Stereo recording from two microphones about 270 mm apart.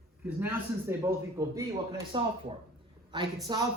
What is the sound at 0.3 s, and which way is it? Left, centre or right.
Speech, centre.